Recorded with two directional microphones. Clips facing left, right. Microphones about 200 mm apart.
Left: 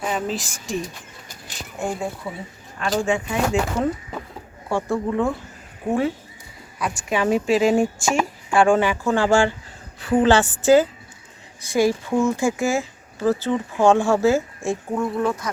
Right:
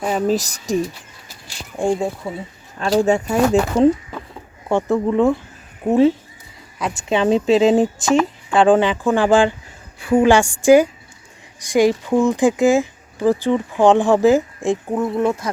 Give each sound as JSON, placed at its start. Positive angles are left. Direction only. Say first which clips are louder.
{"t": 0.0, "sound": "speech", "louder": "right 7 dB", "side_deg": -40}
{"t": 1.8, "sound": "a woman's voice", "louder": "right 7 dB", "side_deg": -30}
{"t": 4.7, "sound": "a woman's voice", "louder": "right 5 dB", "side_deg": -20}
{"t": 8.1, "sound": "speech", "louder": "right 7 dB", "side_deg": 10}
{"t": 8.5, "sound": "speech", "louder": "right 3 dB", "side_deg": -20}